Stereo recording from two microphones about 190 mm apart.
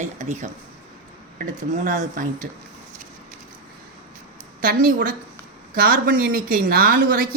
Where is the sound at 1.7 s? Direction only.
40° right (ahead or behind).